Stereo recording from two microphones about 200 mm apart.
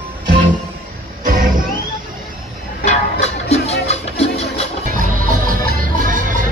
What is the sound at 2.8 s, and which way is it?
Music, 50° left (ahead or behind).